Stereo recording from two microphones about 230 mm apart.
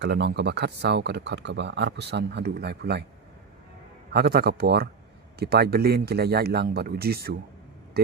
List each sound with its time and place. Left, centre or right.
0.0 s speech: right
4.1 s speech: right